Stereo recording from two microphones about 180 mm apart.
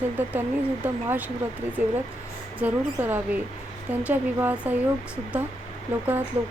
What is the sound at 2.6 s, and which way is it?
A woman's voice, 10° right (ahead or behind).